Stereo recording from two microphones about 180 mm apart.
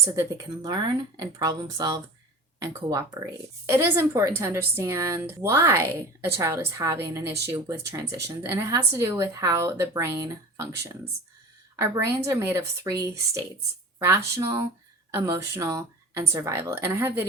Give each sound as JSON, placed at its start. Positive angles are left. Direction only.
{"t": 0.0, "sound": "a woman's voice", "side_deg": -20}